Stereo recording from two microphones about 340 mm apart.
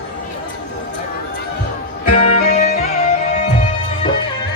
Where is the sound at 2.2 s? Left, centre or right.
Centre.